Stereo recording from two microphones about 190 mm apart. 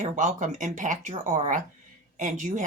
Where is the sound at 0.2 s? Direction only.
40° right (ahead or behind).